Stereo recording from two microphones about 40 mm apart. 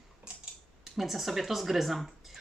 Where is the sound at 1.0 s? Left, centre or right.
Centre.